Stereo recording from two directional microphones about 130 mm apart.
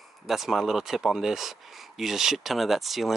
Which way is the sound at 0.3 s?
Centre (ahead or behind).